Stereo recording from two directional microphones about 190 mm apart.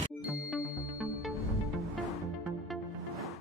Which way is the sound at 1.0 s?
Centre (ahead or behind).